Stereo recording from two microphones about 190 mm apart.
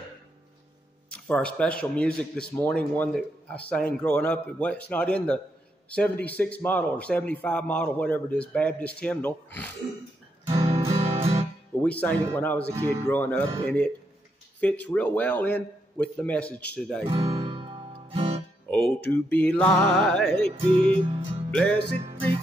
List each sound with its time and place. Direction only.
1.1 s speech: 5° left (ahead or behind)
10.5 s guitar: 30° right (ahead or behind)
10.9 s music: 30° right (ahead or behind)
11.8 s speech: 10° left (ahead or behind)
17.0 s music: 25° right (ahead or behind)
18.7 s music: 5° left (ahead or behind)
20.4 s music: 30° right (ahead or behind)